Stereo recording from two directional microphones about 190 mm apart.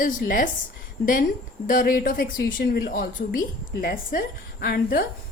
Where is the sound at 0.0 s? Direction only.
45° left (ahead or behind).